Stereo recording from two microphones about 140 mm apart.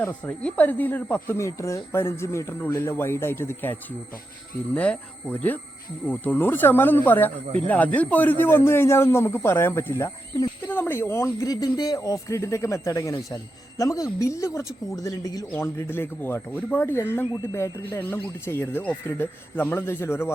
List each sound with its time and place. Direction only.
0.0 s speech: 10° left (ahead or behind)
7.4 s speech: 45° right (ahead or behind)
7.7 s speech: 10° left (ahead or behind)